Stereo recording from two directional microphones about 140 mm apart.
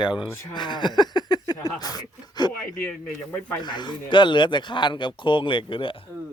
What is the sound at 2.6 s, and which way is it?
Speech, 10° left (ahead or behind).